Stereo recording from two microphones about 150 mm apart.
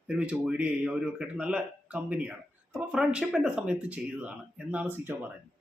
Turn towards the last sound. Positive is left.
turn(degrees=-10)  # may be behind; listen again after turning